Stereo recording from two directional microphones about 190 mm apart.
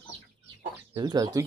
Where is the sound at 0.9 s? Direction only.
25° right (ahead or behind).